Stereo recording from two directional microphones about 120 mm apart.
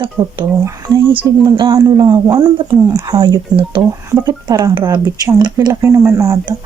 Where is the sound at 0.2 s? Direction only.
10° right (ahead or behind).